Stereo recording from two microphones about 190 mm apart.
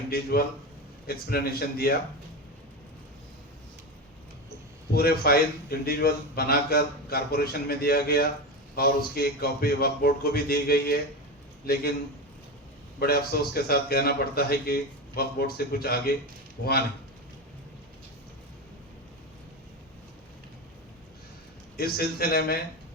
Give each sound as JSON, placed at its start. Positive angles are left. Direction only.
{"t": 0.1, "sound": "a man's voice", "side_deg": 55}
{"t": 4.9, "sound": "a man's voice", "side_deg": 55}
{"t": 13.0, "sound": "a man's voice", "side_deg": 55}
{"t": 21.8, "sound": "a man's voice", "side_deg": 55}